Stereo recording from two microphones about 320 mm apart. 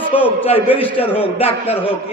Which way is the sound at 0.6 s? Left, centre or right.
Centre.